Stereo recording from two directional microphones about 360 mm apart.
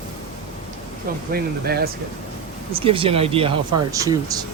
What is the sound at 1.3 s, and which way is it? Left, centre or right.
Speech, right.